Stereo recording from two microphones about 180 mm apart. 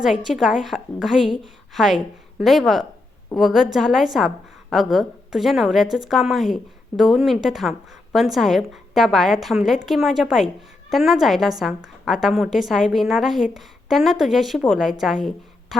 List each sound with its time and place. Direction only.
0.3 s a woman's voice: centre (ahead or behind)